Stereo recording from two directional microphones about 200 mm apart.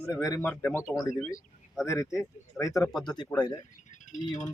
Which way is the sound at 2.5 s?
15° left (ahead or behind).